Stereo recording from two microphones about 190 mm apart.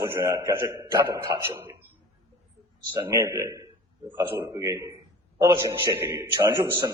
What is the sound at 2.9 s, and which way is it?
A man's voice, 15° right (ahead or behind).